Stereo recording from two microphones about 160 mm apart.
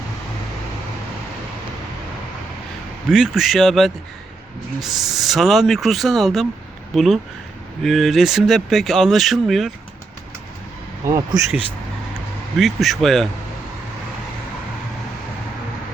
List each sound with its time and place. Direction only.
3.1 s speech: 5° right (ahead or behind)
11.3 s speech: 25° right (ahead or behind)
12.5 s speech: centre (ahead or behind)